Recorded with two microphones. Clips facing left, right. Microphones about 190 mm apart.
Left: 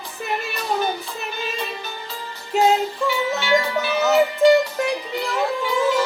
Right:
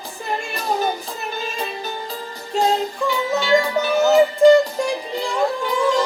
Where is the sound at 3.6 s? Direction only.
40° right (ahead or behind).